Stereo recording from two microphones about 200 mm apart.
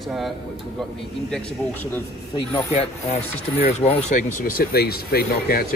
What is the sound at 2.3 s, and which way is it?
Speech, 30° left (ahead or behind).